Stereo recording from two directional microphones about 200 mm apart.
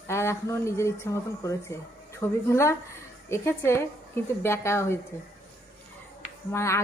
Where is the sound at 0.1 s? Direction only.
15° left (ahead or behind).